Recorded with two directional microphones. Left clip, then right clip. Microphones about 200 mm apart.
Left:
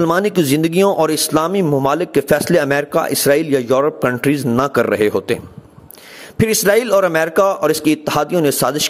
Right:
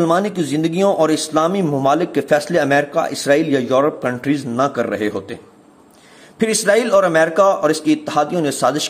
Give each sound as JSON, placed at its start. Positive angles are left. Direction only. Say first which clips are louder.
{"t": 0.0, "sound": "a man's voice", "louder": "left 2 dB", "side_deg": 45}